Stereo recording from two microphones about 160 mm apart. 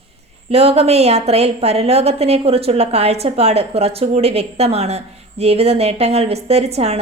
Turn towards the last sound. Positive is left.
turn(degrees=-40)  # may be behind; listen again after turning